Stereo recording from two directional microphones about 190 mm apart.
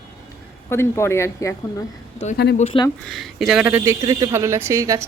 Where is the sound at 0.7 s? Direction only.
15° left (ahead or behind).